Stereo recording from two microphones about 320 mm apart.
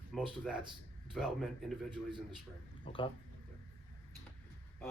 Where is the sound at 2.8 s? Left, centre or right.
Centre.